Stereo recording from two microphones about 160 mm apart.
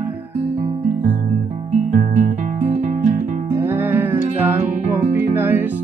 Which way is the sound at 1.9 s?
55° right (ahead or behind).